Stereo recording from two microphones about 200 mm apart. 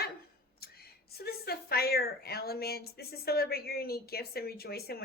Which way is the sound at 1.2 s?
50° left (ahead or behind).